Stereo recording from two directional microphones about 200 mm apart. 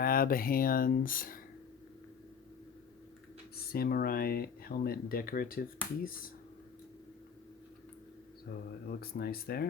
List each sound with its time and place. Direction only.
0.0 s speech: 45° left (ahead or behind)
3.5 s speech: 50° left (ahead or behind)
8.9 s speech: 50° left (ahead or behind)